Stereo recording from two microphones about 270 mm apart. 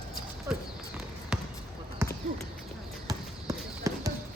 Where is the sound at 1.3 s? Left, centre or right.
Centre.